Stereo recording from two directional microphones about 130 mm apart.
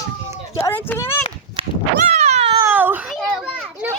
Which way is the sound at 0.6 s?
15° left (ahead or behind).